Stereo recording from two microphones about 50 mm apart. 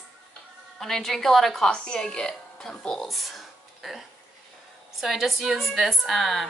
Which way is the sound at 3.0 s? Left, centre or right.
Centre.